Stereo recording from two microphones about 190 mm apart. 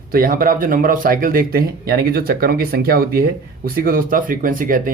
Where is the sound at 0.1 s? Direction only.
50° right (ahead or behind).